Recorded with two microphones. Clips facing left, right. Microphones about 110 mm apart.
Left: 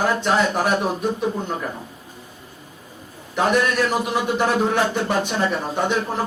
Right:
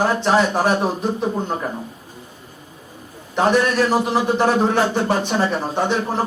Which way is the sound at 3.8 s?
35° right (ahead or behind).